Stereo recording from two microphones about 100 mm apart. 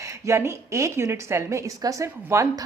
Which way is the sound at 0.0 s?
30° right (ahead or behind).